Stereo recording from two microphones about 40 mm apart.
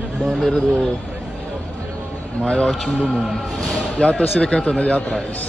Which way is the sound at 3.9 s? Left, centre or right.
Left.